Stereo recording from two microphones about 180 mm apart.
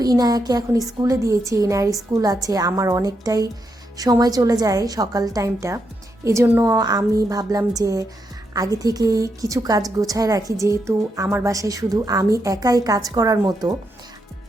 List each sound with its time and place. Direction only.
0.0 s a woman's voice: 20° right (ahead or behind)